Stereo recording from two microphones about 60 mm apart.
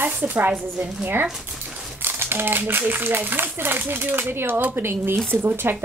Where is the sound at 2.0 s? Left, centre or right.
Right.